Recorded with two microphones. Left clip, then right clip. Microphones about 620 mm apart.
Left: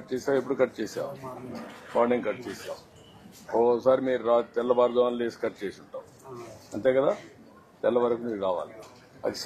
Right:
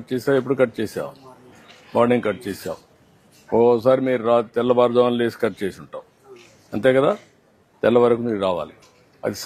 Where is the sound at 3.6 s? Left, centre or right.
Right.